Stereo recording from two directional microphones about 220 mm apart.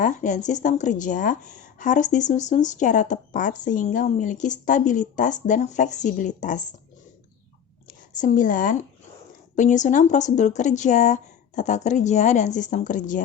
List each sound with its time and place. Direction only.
0.0 s speech: 35° left (ahead or behind)
8.2 s speech: 35° left (ahead or behind)